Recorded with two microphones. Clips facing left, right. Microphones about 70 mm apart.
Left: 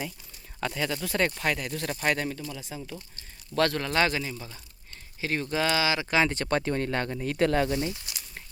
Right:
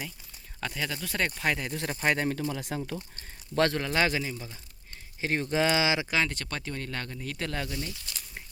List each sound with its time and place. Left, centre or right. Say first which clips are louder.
0.6 s speech: left 4 dB; centre
1.5 s speech: left 1 dB; right
2.5 s speech: right 5 dB; right
2.9 s speech: right 4 dB; right
3.8 s speech: left 1 dB; centre
5.2 s speech: right 1 dB; right
6.2 s speech: left 8 dB; left
7.9 s speech: left 7 dB; left